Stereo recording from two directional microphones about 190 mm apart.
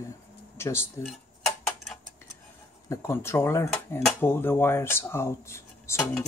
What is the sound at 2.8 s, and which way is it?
Speech, 15° left (ahead or behind).